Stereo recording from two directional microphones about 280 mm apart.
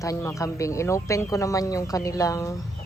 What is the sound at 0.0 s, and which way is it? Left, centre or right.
A woman's voice, centre.